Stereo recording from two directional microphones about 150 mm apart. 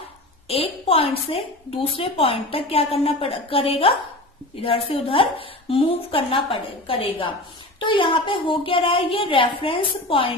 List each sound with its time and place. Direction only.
0.4 s a woman's voice: 40° left (ahead or behind)